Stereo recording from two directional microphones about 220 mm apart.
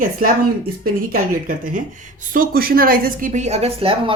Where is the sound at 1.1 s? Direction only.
40° right (ahead or behind).